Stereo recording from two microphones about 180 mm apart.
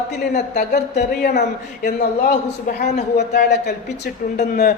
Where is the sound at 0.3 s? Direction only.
45° left (ahead or behind); by 4.1 s 65° left (ahead or behind).